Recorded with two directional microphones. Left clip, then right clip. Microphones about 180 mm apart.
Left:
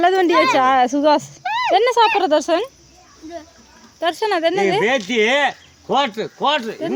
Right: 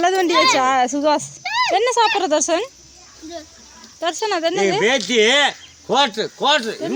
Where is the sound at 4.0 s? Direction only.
15° left (ahead or behind).